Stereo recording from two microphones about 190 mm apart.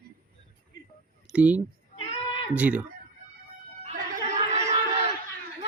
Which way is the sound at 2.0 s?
25° left (ahead or behind).